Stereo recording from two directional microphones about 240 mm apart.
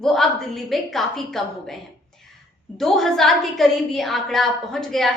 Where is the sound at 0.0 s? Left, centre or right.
Centre.